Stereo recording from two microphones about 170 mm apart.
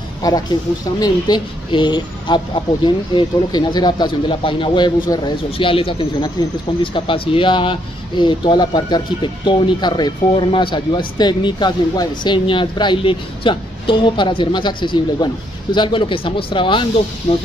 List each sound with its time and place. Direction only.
0.9 s speech: 20° left (ahead or behind); by 17.4 s 40° left (ahead or behind)